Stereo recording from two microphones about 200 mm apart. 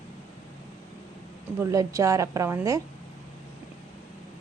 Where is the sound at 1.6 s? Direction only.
15° right (ahead or behind).